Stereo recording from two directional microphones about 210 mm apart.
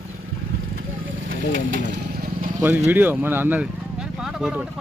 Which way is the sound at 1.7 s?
55° right (ahead or behind).